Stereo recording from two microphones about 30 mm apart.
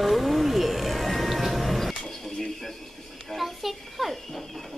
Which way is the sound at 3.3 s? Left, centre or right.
Centre.